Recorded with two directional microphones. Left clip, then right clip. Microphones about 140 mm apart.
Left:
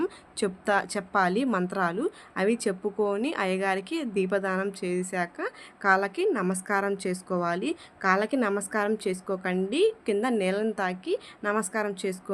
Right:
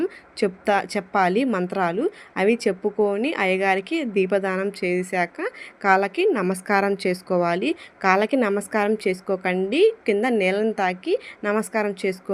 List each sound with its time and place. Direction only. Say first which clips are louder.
0.3 s a woman's voice: right 5 dB; 20° right (ahead or behind)